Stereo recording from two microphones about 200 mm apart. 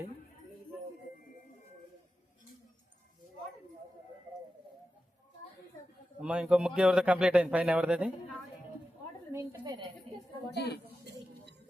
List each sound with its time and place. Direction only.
6.1 s speech: 5° right (ahead or behind)
9.3 s a woman's voice: 15° right (ahead or behind)
10.5 s a woman's voice: 55° left (ahead or behind)